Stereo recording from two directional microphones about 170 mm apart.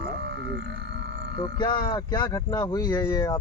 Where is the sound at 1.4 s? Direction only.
25° left (ahead or behind).